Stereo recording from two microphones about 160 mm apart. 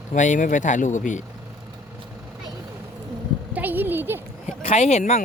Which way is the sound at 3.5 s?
10° right (ahead or behind).